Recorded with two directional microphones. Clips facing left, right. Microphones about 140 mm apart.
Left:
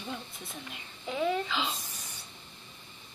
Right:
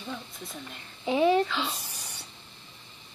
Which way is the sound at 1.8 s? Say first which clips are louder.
Right 2 dB; 75° right (ahead or behind).